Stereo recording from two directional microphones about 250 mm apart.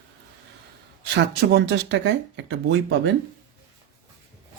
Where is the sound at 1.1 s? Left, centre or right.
Right.